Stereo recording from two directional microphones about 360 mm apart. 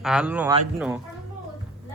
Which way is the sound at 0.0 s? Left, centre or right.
Centre.